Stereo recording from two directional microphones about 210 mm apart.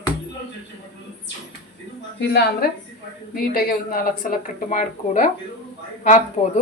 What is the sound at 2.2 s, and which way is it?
A woman's voice, 50° left (ahead or behind).